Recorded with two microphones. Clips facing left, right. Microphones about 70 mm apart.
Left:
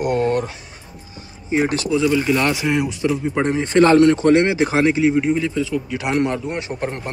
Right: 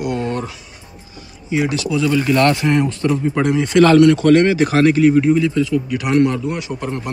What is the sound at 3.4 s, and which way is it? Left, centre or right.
A man's voice, left.